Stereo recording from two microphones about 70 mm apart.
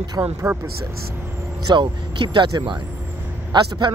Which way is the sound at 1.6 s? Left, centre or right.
Right.